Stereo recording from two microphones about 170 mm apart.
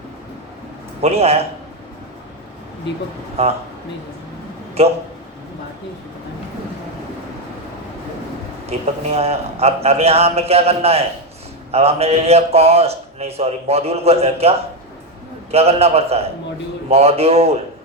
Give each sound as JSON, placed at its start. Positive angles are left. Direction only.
{"t": 1.0, "sound": "a man's voice", "side_deg": -35}
{"t": 3.4, "sound": "a man's voice", "side_deg": -35}
{"t": 4.8, "sound": "a man's voice", "side_deg": -40}
{"t": 9.0, "sound": "a man's voice", "side_deg": -40}
{"t": 15.5, "sound": "a man's voice", "side_deg": -35}